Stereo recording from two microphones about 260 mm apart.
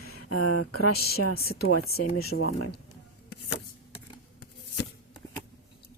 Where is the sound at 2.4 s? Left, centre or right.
Left.